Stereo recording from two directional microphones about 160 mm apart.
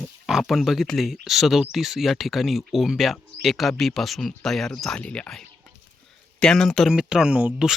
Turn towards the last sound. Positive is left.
turn(degrees=-5)  # may be behind; listen again after turning